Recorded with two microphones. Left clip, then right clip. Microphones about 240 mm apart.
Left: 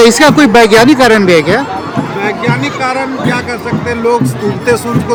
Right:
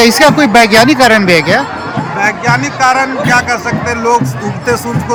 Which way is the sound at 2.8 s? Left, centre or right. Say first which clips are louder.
Right 4 dB; centre.